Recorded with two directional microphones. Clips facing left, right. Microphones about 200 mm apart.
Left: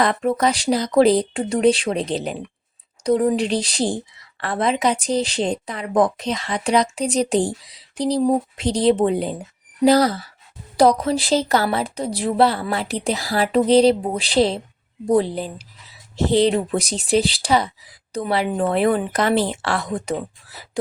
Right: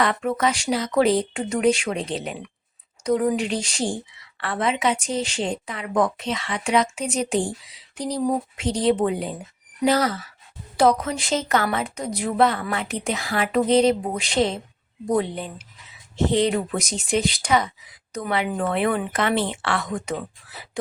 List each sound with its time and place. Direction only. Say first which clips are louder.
0.0 s a woman's voice: left 3 dB; 35° left (ahead or behind)